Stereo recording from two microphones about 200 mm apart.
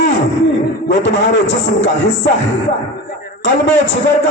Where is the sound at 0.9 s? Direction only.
60° left (ahead or behind).